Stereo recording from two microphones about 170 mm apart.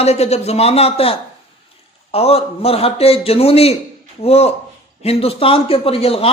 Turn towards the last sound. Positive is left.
turn(degrees=35)  # may be behind; listen again after turning